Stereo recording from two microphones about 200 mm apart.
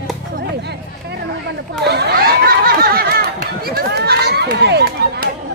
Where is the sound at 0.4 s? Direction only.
55° right (ahead or behind).